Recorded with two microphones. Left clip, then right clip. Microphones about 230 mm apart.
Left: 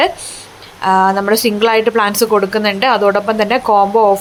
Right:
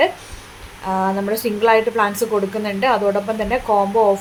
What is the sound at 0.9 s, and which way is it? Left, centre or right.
Speech, left.